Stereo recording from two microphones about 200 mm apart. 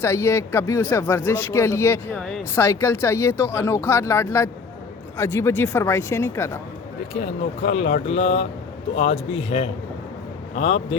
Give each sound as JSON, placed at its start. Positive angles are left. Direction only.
{"t": 0.0, "sound": "speech", "side_deg": 10}
{"t": 7.7, "sound": "speech", "side_deg": 70}
{"t": 8.0, "sound": "a man's voice", "side_deg": 30}